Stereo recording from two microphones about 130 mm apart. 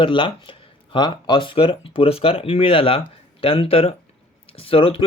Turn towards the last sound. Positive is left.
turn(degrees=45)  # may be behind; listen again after turning